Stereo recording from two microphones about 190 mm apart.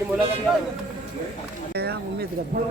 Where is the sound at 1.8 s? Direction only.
55° right (ahead or behind).